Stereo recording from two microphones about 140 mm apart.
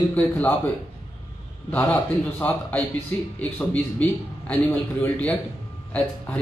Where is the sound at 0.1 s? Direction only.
15° left (ahead or behind).